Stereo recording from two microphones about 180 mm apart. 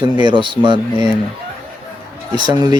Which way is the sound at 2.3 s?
25° right (ahead or behind).